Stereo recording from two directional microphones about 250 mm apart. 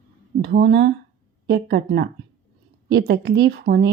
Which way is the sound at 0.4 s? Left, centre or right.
Right.